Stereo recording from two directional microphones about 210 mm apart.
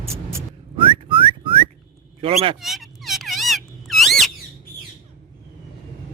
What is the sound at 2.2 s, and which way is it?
Speech, 25° right (ahead or behind).